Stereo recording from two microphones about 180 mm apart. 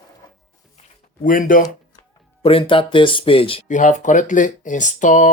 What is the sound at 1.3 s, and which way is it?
Speech, 50° left (ahead or behind).